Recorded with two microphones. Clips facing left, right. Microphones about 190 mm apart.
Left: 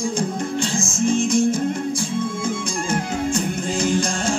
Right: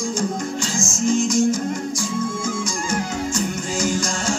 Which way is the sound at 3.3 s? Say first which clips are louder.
Left 2 dB; 55° left (ahead or behind).